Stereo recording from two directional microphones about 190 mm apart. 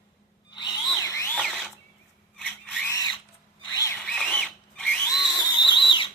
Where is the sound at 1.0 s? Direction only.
15° left (ahead or behind).